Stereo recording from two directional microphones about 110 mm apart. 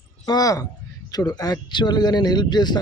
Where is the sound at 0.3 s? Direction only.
35° left (ahead or behind).